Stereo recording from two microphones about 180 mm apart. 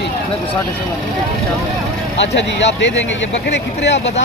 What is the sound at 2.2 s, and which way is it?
Speech, 80° left.